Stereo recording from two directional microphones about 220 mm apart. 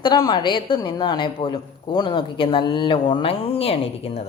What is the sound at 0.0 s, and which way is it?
Speech, 20° left (ahead or behind).